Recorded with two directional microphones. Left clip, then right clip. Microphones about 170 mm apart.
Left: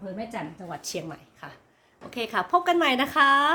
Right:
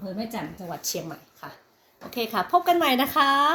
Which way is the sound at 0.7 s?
20° left (ahead or behind).